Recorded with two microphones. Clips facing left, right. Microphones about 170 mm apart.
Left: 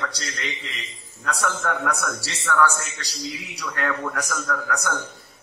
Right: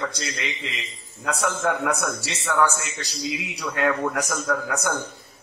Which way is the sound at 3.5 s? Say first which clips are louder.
Right 4 dB; 20° right (ahead or behind).